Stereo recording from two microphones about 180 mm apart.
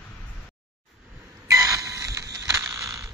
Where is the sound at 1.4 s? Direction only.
15° right (ahead or behind).